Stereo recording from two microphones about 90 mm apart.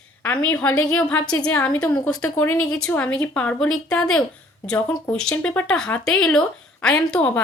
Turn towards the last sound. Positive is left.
turn(degrees=10)  # may be behind; listen again after turning